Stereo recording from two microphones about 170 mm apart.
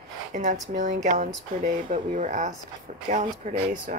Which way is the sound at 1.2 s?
55° right (ahead or behind).